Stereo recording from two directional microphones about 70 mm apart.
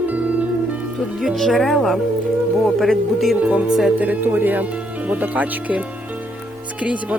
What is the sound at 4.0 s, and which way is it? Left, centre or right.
Speech, right.